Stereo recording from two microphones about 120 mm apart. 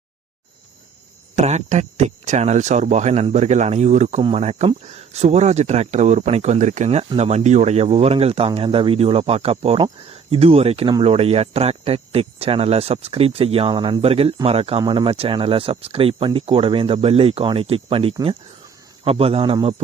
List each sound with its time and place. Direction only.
1.4 s speech: 70° right (ahead or behind)
4.2 s speech: 55° right (ahead or behind); by 7.0 s 85° right
7.2 s speech: 65° right (ahead or behind)